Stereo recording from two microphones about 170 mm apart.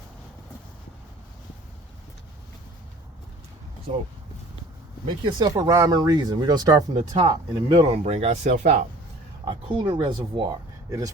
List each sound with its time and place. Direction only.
5.0 s speech: 25° right (ahead or behind); by 8.9 s 40° right (ahead or behind)
9.4 s speech: 25° right (ahead or behind)